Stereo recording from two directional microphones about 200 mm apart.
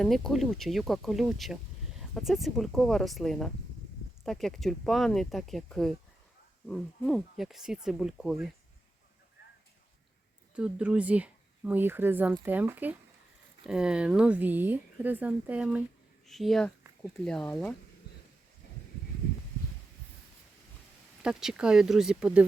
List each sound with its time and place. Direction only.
0.0 s speech: centre (ahead or behind)
10.5 s speech: 5° right (ahead or behind)
21.2 s speech: 5° right (ahead or behind)